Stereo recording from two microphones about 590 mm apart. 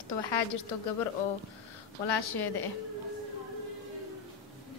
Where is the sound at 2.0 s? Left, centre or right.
Left.